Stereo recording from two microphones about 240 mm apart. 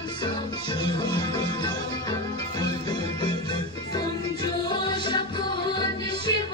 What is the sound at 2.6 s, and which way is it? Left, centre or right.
Music, centre.